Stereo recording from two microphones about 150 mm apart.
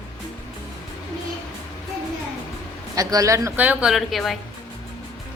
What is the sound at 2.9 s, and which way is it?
A woman's voice, 20° right (ahead or behind).